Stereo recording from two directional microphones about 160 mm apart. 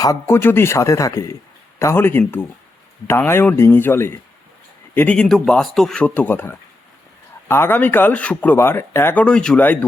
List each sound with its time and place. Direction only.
0.0 s speech: 20° left (ahead or behind)